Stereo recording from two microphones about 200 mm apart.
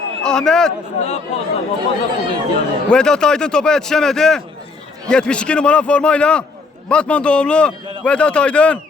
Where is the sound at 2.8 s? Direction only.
5° left (ahead or behind).